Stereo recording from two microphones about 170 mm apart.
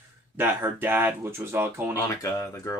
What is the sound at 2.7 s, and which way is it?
Speech, 20° left (ahead or behind).